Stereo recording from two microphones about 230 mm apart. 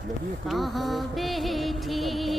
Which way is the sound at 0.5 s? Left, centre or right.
Centre.